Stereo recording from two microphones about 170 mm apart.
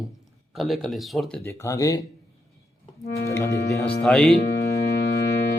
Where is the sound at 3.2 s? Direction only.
20° left (ahead or behind).